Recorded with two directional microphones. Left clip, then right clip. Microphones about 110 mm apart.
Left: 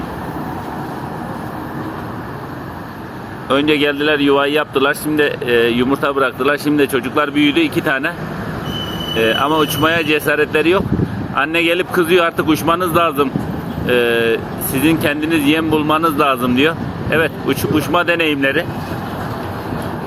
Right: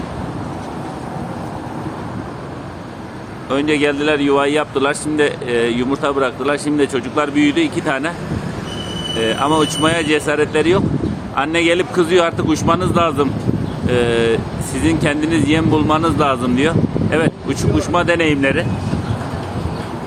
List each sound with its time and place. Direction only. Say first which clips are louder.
3.5 s speech: left 2 dB; 15° left (ahead or behind)
9.1 s speech: left 2 dB; 15° left (ahead or behind)